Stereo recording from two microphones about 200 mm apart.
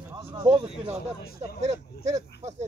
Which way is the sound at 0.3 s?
20° right (ahead or behind).